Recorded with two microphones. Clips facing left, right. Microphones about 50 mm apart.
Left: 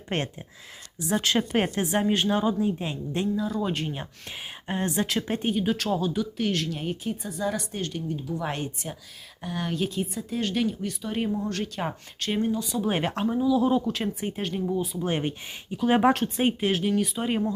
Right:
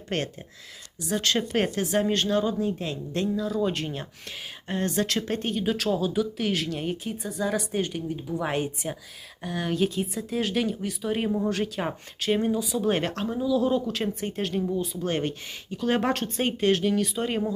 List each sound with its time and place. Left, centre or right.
0.1 s speech: left
1.1 s speech: centre
1.8 s speech: left
2.0 s speech: centre
3.4 s speech: centre
4.3 s speech: centre
7.8 s a woman's voice: centre
9.4 s speech: centre
12.8 s speech: centre